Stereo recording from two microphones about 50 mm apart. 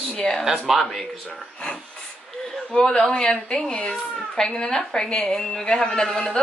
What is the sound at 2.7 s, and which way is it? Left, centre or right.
A woman's voice, centre.